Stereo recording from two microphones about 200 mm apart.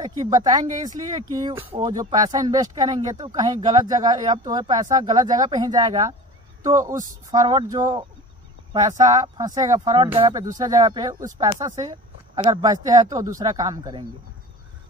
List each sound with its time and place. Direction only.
0.0 s speech: 20° right (ahead or behind)